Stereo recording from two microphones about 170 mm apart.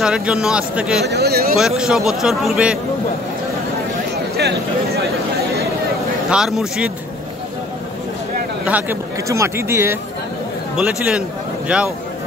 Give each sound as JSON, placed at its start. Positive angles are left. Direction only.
{"t": 0.0, "sound": "speech", "side_deg": -5}
{"t": 1.1, "sound": "speech", "side_deg": -70}
{"t": 1.8, "sound": "speech", "side_deg": 0}
{"t": 4.4, "sound": "speech", "side_deg": -75}
{"t": 6.3, "sound": "speech", "side_deg": -5}
{"t": 8.6, "sound": "a man's voice", "side_deg": -10}